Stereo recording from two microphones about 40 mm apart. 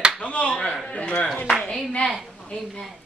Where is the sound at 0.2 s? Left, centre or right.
Left.